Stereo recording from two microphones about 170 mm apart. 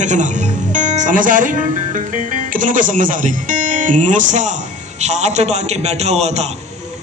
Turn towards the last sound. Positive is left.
turn(degrees=-40)  # may be behind; listen again after turning